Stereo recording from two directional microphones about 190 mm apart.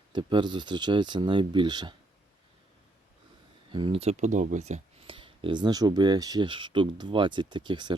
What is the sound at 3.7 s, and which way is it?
Speech, 25° right (ahead or behind).